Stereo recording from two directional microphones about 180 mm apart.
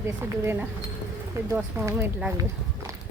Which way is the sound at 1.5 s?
15° right (ahead or behind).